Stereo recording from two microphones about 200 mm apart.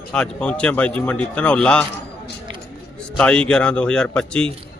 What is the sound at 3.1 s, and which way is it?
A man's voice, 5° left (ahead or behind).